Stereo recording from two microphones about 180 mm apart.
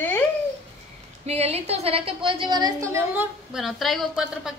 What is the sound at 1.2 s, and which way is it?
A woman's voice, 35° right (ahead or behind).